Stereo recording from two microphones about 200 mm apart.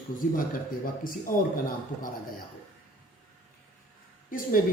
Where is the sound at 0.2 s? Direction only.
40° left (ahead or behind).